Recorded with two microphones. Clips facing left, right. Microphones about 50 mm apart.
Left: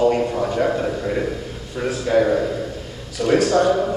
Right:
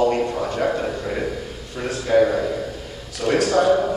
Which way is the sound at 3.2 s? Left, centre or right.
Centre.